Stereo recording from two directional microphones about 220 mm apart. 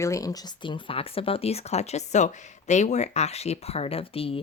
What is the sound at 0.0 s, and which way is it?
Speech, 15° left (ahead or behind).